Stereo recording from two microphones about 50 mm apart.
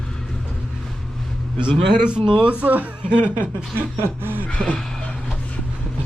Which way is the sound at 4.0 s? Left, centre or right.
Right.